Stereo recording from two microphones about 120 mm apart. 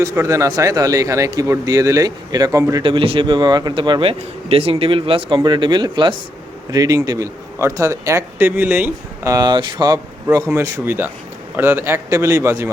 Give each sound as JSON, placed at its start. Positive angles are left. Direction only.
{"t": 0.0, "sound": "speech", "side_deg": -25}
{"t": 2.8, "sound": "a man's voice", "side_deg": -45}
{"t": 9.2, "sound": "speech", "side_deg": -35}
{"t": 10.2, "sound": "speech", "side_deg": -25}